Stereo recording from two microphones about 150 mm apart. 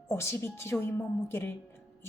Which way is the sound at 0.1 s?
15° left (ahead or behind).